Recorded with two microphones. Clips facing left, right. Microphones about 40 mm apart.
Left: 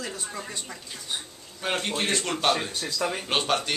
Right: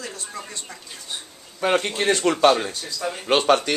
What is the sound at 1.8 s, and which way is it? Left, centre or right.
Speech, right.